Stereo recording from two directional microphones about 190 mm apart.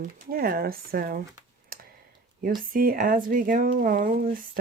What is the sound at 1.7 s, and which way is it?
Clicking, 50° right (ahead or behind).